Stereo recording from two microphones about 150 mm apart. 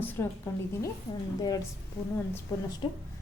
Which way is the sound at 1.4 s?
25° left (ahead or behind).